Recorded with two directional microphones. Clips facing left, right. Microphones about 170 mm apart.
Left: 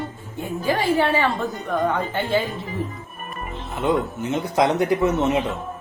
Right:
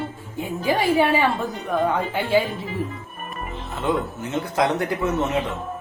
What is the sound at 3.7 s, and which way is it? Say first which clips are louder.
Speech: left 2 dB; 15° left (ahead or behind).